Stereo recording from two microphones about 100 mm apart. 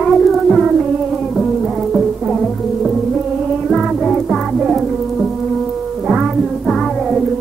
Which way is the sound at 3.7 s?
Centre (ahead or behind).